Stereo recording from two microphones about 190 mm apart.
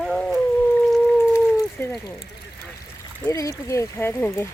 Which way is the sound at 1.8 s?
10° left (ahead or behind).